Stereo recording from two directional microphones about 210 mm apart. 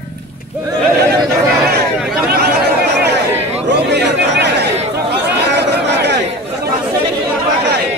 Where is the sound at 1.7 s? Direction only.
50° right (ahead or behind).